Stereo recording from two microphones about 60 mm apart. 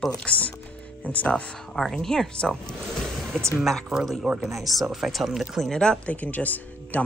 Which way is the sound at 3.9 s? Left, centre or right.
Centre.